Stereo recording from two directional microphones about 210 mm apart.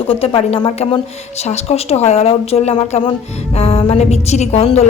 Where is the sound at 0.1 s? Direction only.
25° left (ahead or behind).